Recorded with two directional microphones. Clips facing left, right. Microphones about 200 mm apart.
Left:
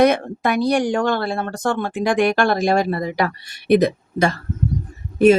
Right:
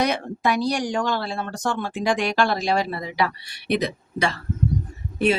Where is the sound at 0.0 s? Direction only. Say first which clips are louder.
Left 7 dB; 55° left (ahead or behind).